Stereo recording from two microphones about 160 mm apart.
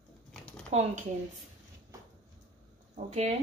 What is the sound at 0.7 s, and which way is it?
Speech, 45° right (ahead or behind).